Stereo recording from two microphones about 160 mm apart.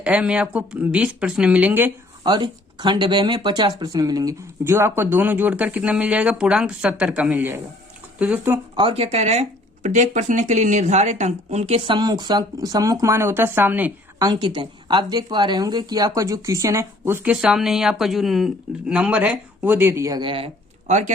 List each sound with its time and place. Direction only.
0.0 s speech: 5° right (ahead or behind)
2.2 s speech: 25° right (ahead or behind); by 8.6 s 10° right (ahead or behind)
8.7 s speech: 35° right (ahead or behind)
11.9 s speech: 25° right (ahead or behind)
14.2 s speech: 25° right (ahead or behind); by 21.1 s 45° right (ahead or behind)